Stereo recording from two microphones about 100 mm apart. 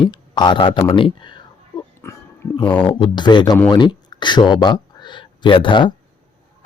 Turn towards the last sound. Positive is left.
turn(degrees=55)  # may be behind; listen again after turning